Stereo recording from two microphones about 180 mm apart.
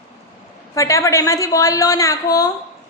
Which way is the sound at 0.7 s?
15° left (ahead or behind).